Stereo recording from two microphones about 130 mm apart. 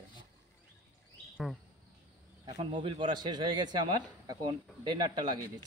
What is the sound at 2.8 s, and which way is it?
Speech, 35° right (ahead or behind).